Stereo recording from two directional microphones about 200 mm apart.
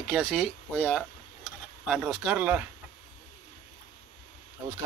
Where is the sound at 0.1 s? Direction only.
Centre (ahead or behind).